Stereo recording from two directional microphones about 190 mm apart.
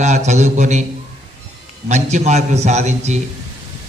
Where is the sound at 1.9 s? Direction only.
40° right (ahead or behind).